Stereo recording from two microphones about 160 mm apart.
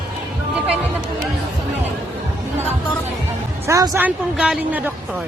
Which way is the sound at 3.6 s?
20° right (ahead or behind).